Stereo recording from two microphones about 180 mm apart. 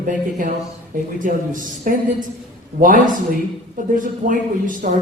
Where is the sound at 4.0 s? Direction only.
45° right (ahead or behind).